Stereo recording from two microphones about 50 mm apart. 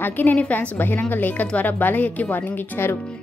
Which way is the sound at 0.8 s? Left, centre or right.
Left.